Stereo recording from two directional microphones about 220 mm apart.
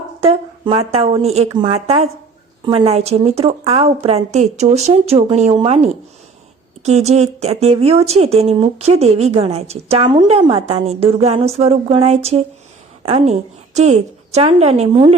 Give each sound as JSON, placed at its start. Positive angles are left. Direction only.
{"t": 0.2, "sound": "a woman's voice", "side_deg": -25}